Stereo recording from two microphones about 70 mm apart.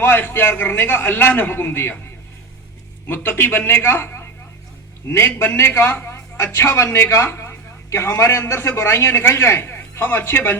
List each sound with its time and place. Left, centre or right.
0.0 s a man's voice: left
3.1 s a man's voice: left